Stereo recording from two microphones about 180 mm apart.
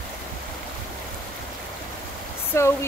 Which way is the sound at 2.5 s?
15° left (ahead or behind).